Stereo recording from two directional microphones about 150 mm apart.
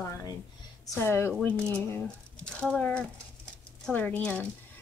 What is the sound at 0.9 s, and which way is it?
Speech, 15° left (ahead or behind).